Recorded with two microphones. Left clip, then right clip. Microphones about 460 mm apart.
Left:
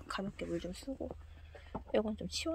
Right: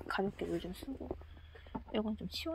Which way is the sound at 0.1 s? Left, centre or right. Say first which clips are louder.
Right 5 dB; centre.